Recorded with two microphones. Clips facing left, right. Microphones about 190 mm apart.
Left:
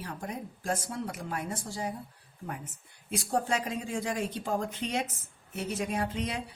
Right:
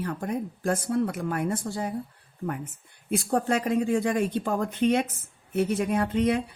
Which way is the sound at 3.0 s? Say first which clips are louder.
Right 5 dB; 55° right (ahead or behind).